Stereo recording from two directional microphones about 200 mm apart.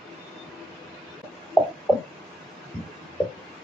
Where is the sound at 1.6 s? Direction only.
5° right (ahead or behind).